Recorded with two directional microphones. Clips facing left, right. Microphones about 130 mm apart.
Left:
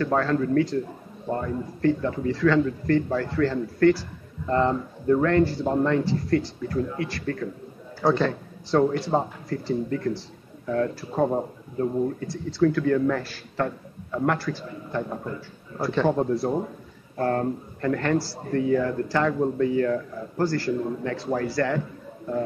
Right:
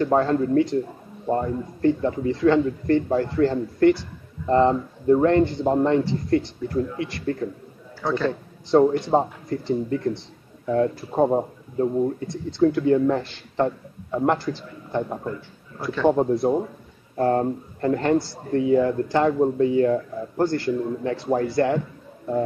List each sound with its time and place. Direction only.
0.0 s speech: 25° right (ahead or behind)
8.6 s a man's voice: 20° right (ahead or behind)
16.1 s speech: 20° right (ahead or behind)